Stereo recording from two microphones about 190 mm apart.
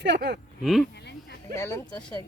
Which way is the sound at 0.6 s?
Centre (ahead or behind).